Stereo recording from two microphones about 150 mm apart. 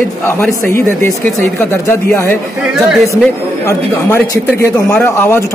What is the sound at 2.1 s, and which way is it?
Speech, 15° left (ahead or behind).